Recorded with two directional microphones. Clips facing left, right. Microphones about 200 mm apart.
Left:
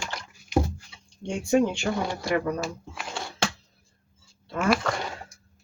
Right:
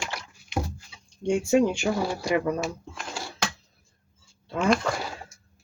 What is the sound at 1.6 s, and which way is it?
Speech, 10° right (ahead or behind).